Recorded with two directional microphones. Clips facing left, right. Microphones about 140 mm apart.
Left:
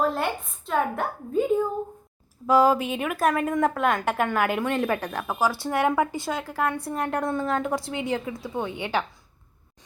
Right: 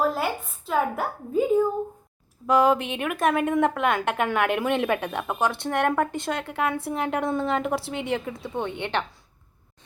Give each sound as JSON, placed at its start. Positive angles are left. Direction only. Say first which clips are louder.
{"t": 0.0, "sound": "a woman's voice", "louder": "even", "side_deg": -5}